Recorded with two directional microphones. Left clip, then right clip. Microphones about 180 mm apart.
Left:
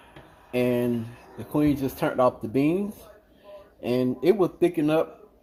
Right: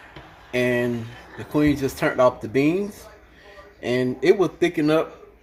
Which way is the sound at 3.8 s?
25° left (ahead or behind).